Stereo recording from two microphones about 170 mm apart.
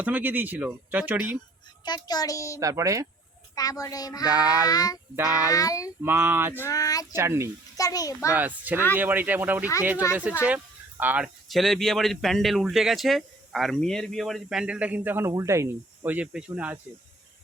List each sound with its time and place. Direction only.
0.0 s speech: 10° right (ahead or behind)
1.8 s a child's voice: 25° left (ahead or behind)
2.6 s speech: 20° right (ahead or behind)
3.5 s a child's voice: 20° left (ahead or behind)
6.0 s speech: 10° right (ahead or behind)
6.6 s a child's voice: 20° left (ahead or behind)
7.1 s speech: 15° right (ahead or behind)
7.8 s a child's voice: 20° left (ahead or behind)
8.3 s speech: 10° right (ahead or behind)
11.0 s speech: 5° right (ahead or behind)